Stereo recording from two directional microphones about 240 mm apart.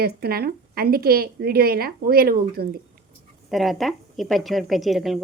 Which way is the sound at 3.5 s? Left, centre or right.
Centre.